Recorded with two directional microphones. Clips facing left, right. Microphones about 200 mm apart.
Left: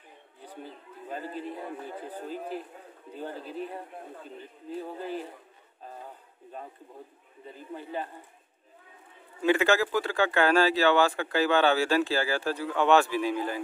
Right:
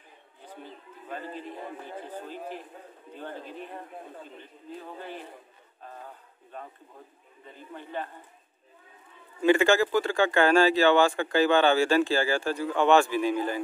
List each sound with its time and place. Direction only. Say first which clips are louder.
0.7 s a sound: even; 10° left (ahead or behind)
1.5 s speech: left 1 dB; 10° left (ahead or behind)
2.1 s a man's voice: left 4 dB; 40° left (ahead or behind)
7.7 s speech: left 1 dB; 10° left (ahead or behind)
9.4 s speech: right 3 dB; centre (ahead or behind)